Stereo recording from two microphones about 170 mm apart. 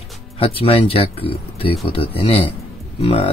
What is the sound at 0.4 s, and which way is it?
Speech, 35° left (ahead or behind).